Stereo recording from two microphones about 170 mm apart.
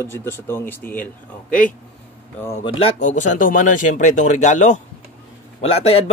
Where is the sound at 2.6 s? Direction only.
30° left (ahead or behind).